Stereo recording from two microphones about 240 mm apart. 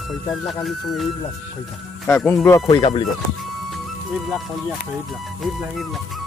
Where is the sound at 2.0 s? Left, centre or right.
Centre.